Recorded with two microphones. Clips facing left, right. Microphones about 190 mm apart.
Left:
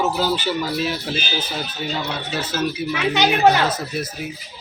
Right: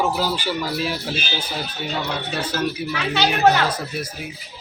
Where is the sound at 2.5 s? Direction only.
15° left (ahead or behind).